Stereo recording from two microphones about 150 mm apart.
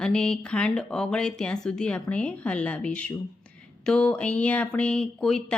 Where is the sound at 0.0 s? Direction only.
5° left (ahead or behind).